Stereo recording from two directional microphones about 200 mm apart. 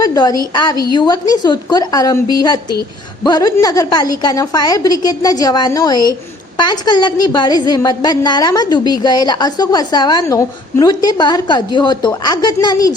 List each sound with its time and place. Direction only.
0.0 s a woman's voice: 20° left (ahead or behind)